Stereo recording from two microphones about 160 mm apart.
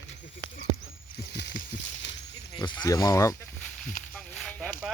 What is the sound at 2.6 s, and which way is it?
Sheep, 25° left (ahead or behind).